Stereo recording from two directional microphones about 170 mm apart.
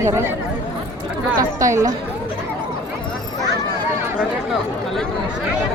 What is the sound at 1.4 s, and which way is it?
Speech, 20° right (ahead or behind).